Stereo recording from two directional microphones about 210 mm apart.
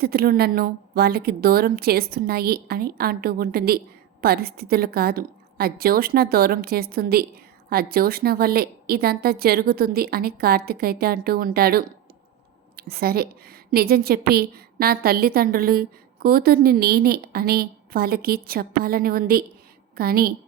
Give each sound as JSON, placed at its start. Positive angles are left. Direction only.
{"t": 0.0, "sound": "a woman's voice", "side_deg": -45}